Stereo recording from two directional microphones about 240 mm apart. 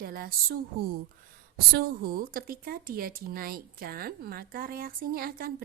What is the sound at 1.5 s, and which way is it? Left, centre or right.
A woman's voice, right.